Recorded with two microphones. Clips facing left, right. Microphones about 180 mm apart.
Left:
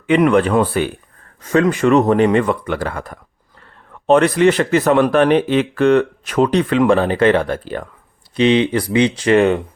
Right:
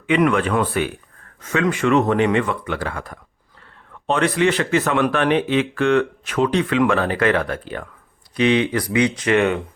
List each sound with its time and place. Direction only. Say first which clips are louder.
0.2 s speech: left 5 dB; 35° left (ahead or behind)